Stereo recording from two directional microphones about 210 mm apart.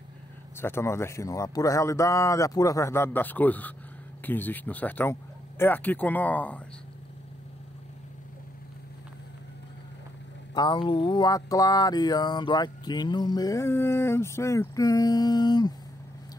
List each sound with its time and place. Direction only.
0.6 s speech: 10° left (ahead or behind)
10.5 s speech: 20° left (ahead or behind)